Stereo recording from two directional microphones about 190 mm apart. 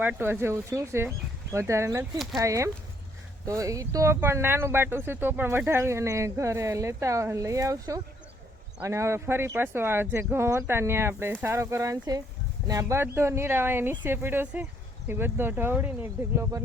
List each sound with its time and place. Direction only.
0.0 s speech: 10° right (ahead or behind)